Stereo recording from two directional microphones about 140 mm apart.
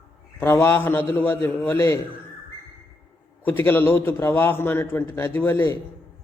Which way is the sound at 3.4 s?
15° left (ahead or behind).